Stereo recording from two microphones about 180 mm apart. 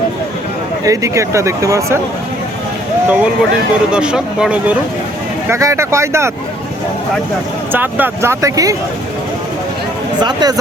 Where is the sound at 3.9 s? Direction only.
5° right (ahead or behind).